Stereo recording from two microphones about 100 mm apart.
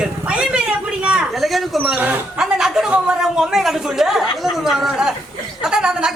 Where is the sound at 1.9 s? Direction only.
20° right (ahead or behind).